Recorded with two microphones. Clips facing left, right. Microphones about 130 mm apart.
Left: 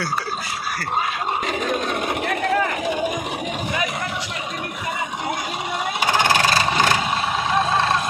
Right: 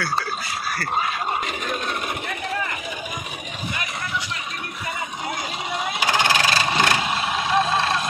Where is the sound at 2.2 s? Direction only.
75° left (ahead or behind).